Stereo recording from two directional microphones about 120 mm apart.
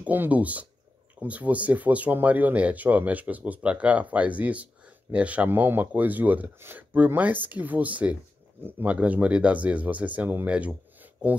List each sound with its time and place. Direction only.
0.0 s speech: 15° right (ahead or behind)